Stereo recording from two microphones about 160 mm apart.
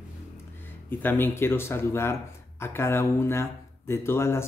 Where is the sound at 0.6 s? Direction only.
15° left (ahead or behind).